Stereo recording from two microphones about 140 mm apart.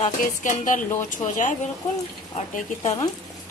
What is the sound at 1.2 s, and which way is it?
Speech, 25° left (ahead or behind).